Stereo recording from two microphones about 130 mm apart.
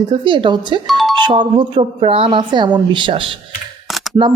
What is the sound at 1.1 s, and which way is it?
A woman's voice, 35° right (ahead or behind).